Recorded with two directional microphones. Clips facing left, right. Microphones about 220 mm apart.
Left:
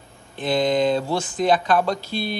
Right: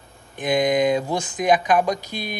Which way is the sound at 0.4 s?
15° right (ahead or behind).